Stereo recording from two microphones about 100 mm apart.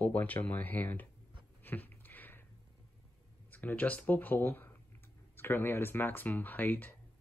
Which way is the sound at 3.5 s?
15° left (ahead or behind).